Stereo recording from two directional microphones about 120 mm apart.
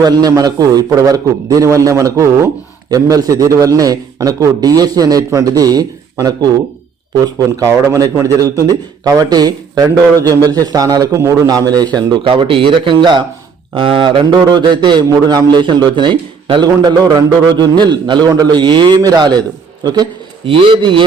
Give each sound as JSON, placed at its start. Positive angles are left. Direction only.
{"t": 0.0, "sound": "a man's voice", "side_deg": -30}
{"t": 11.9, "sound": "a man's voice", "side_deg": -40}
{"t": 20.5, "sound": "speech", "side_deg": -45}